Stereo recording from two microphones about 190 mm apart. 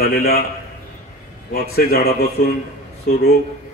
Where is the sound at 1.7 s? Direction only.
55° left (ahead or behind).